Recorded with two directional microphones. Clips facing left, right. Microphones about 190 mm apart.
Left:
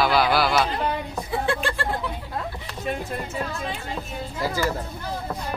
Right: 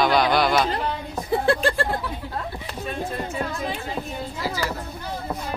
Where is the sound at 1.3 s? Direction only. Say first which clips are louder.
Right 6 dB; 40° right (ahead or behind).